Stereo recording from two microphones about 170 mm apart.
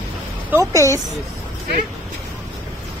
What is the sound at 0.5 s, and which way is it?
Speech, 15° right (ahead or behind).